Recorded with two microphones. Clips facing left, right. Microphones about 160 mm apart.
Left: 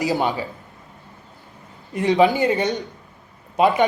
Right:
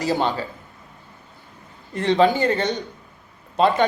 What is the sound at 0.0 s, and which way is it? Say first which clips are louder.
Speech: left 1 dB; 15° left (ahead or behind).